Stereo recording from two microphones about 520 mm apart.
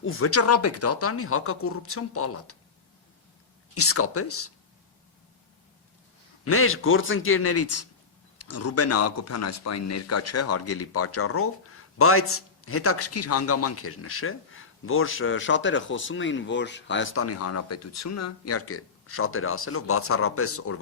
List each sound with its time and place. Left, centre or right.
0.0 s speech: left
3.8 s speech: left
6.4 s speech: left